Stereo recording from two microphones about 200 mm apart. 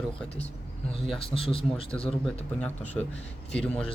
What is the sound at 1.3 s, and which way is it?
Speech, 30° left (ahead or behind).